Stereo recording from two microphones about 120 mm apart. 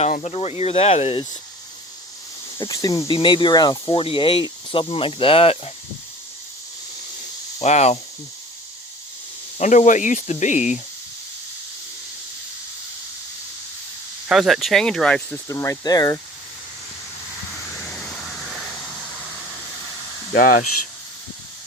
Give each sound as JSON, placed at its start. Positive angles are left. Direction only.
{"t": 0.0, "sound": "speech", "side_deg": 60}
{"t": 2.6, "sound": "speech", "side_deg": 30}
{"t": 4.0, "sound": "speech", "side_deg": 50}
{"t": 7.6, "sound": "speech", "side_deg": 65}
{"t": 9.6, "sound": "speech", "side_deg": 90}
{"t": 14.3, "sound": "speech", "side_deg": 0}
{"t": 15.4, "sound": "speech", "side_deg": 25}
{"t": 17.8, "sound": "a sound", "side_deg": 5}